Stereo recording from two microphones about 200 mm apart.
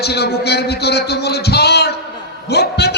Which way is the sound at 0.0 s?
55° left (ahead or behind).